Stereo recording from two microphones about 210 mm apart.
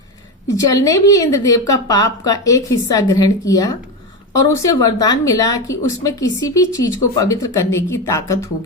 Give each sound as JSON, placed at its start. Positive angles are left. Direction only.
{"t": 0.4, "sound": "a woman's voice", "side_deg": 15}